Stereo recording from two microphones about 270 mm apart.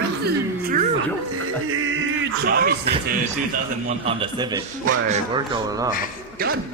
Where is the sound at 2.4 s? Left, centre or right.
Right.